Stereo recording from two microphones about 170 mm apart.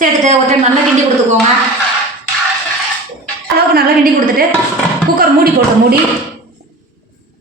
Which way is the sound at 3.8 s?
60° right (ahead or behind).